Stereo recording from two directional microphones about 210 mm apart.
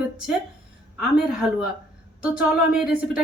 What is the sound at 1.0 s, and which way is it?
Speech, 5° right (ahead or behind).